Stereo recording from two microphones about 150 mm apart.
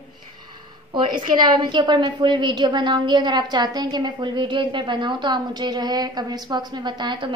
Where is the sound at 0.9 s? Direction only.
30° right (ahead or behind).